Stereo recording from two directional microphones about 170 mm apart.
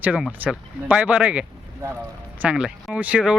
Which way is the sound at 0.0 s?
10° right (ahead or behind).